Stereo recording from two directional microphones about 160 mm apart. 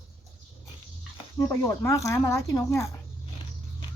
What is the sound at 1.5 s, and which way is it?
Speech, 15° left (ahead or behind).